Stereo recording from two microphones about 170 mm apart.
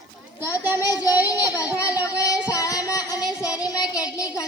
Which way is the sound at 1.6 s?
10° right (ahead or behind).